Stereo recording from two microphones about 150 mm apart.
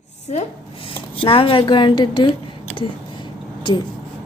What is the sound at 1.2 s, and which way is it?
A woman's voice, 35° left (ahead or behind).